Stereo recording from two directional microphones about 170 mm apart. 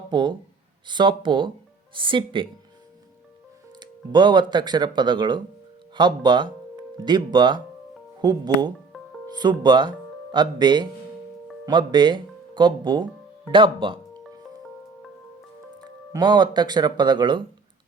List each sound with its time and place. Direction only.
0.1 s a sound: 25° right (ahead or behind)
0.9 s speech: 30° right (ahead or behind)
3.8 s speech: 25° right (ahead or behind)
16.1 s speech: 25° right (ahead or behind)